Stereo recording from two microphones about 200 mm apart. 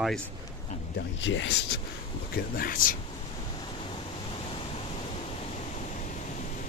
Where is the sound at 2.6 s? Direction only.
45° left (ahead or behind).